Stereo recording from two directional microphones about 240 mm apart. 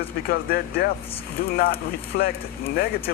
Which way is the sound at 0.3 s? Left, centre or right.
Left.